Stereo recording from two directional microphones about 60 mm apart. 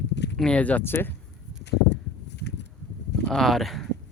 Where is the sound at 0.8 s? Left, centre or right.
Left.